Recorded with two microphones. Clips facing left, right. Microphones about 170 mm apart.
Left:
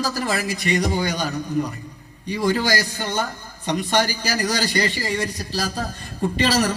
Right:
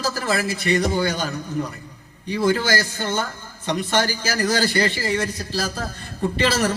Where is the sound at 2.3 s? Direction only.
15° left (ahead or behind).